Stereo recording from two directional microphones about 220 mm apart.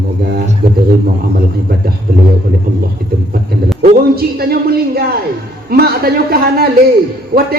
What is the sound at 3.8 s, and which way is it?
A man's voice, 45° right (ahead or behind).